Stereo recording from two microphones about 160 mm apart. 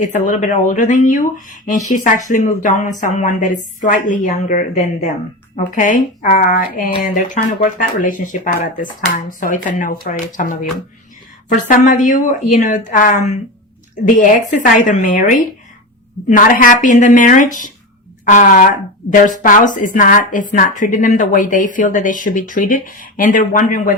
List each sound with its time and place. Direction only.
0.0 s a woman's voice: 50° left (ahead or behind)